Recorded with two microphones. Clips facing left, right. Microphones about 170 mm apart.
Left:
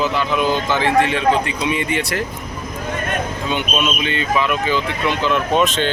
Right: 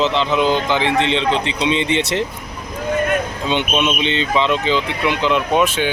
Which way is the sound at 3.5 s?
20° right (ahead or behind).